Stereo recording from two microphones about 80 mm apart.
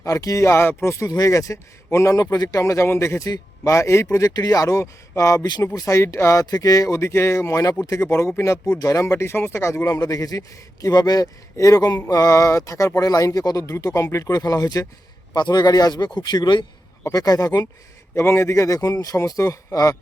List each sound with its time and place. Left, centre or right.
0.0 s speech: left
2.1 s speech: left
2.6 s speech: left
3.2 s a man's voice: left
3.8 s speech: left
4.4 s speech: left
6.4 s speech: left
10.0 s speech: left
15.4 s a man's voice: left
17.0 s speech: left
18.1 s speech: left